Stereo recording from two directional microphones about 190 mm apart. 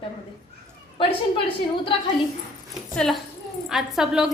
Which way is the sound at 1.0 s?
30° left (ahead or behind).